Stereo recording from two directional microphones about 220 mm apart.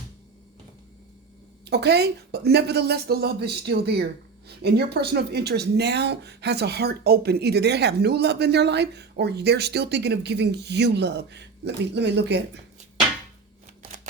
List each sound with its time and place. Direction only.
1.6 s speech: 50° right (ahead or behind)